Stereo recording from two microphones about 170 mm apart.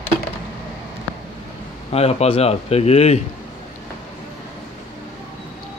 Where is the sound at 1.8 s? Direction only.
35° left (ahead or behind).